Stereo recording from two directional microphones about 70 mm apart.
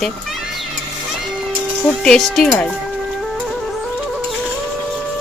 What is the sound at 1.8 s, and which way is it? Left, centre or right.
Speech, centre.